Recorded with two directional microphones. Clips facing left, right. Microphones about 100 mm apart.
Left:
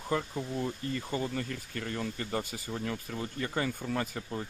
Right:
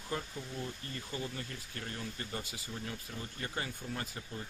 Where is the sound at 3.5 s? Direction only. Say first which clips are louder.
Left 8 dB; 65° left (ahead or behind).